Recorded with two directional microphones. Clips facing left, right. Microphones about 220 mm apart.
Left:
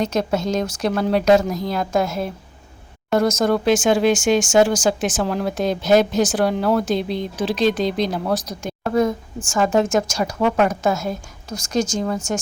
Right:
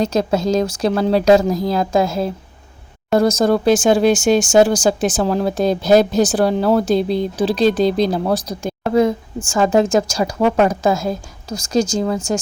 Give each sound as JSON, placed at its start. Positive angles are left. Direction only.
{"t": 0.0, "sound": "speech", "side_deg": -35}